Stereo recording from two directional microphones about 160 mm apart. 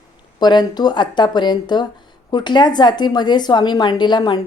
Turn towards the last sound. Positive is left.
turn(degrees=30)  # may be behind; listen again after turning